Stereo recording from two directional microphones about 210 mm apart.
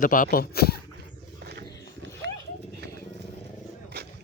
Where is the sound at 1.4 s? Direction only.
50° right (ahead or behind).